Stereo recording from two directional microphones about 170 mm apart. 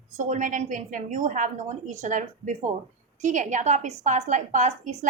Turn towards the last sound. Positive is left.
turn(degrees=-45)  # may be behind; listen again after turning